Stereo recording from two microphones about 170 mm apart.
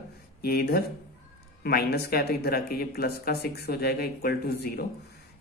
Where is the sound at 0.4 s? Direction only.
65° left (ahead or behind).